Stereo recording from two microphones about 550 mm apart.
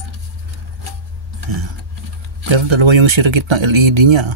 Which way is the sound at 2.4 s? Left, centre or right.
Right.